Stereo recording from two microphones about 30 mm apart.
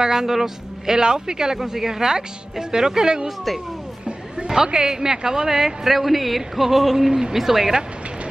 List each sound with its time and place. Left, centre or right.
0.0 s speech: centre
4.7 s speech: centre
7.1 s speech: centre